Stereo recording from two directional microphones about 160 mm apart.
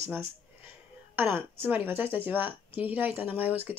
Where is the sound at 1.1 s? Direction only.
15° right (ahead or behind).